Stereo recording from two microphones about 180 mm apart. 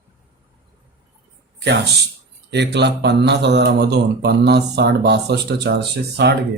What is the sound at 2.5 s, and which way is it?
Speech, 70° right (ahead or behind).